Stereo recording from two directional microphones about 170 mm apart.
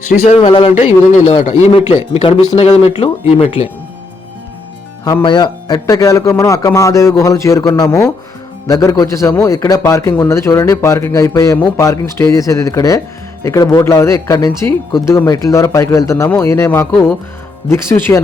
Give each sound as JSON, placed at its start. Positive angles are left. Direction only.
{"t": 0.3, "sound": "a man's voice", "side_deg": 35}
{"t": 5.2, "sound": "a man's voice", "side_deg": 25}